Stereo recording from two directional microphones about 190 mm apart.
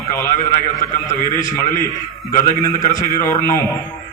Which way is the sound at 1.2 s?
45° left (ahead or behind).